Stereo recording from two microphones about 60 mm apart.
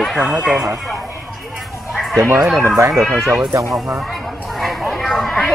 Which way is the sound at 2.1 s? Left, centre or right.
Right.